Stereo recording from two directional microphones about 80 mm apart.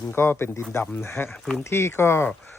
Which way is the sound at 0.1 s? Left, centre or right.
Left.